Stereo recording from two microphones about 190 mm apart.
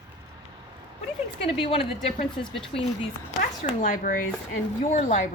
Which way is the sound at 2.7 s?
30° left (ahead or behind).